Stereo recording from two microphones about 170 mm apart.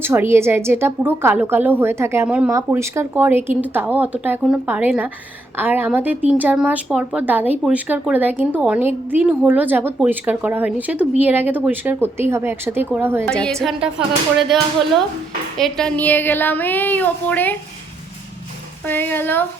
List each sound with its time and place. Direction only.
0.0 s a woman's voice: 15° right (ahead or behind)
13.2 s a woman's voice: 5° left (ahead or behind)
15.5 s speech: 5° left (ahead or behind)
18.9 s speech: 10° left (ahead or behind)